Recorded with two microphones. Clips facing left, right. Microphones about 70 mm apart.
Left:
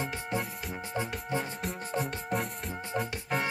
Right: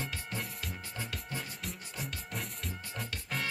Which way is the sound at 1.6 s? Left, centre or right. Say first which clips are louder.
Left 9 dB; left.